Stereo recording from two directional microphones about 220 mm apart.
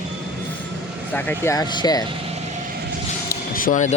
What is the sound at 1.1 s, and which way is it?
Speech, 5° left (ahead or behind).